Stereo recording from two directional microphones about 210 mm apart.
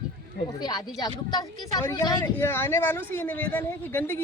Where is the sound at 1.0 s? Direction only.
20° left (ahead or behind).